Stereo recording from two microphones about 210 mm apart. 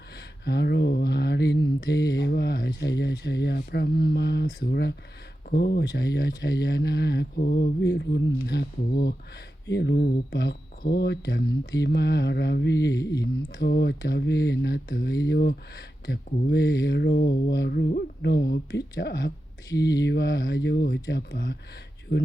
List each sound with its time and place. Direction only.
0.4 s speech: 55° left (ahead or behind)